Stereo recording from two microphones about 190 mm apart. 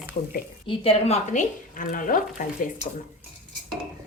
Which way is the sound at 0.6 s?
30° left (ahead or behind).